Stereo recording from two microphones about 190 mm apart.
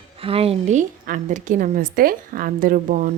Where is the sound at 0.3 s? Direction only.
30° right (ahead or behind).